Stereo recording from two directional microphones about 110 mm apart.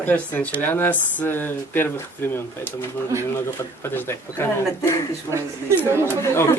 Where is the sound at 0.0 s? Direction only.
15° left (ahead or behind).